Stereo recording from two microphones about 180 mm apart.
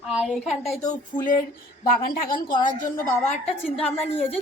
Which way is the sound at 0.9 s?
50° left (ahead or behind).